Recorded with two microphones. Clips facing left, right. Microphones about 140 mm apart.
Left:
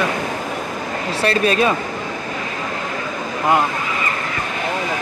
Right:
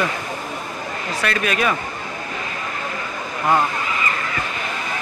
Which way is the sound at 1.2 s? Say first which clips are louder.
Left 5 dB; 30° left (ahead or behind).